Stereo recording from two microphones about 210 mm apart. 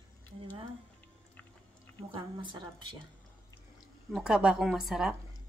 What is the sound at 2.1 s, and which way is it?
Speech, 25° right (ahead or behind).